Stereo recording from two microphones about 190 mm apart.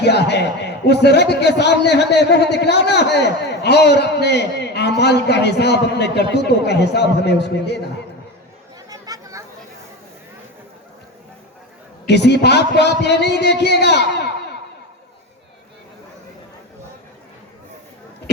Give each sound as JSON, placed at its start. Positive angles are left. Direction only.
{"t": 0.0, "sound": "a man's voice", "side_deg": 60}
{"t": 8.9, "sound": "chatter", "side_deg": -20}
{"t": 12.0, "sound": "a man's voice", "side_deg": 60}